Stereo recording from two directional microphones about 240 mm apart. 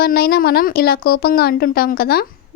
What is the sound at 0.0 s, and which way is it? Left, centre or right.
A woman's voice, left.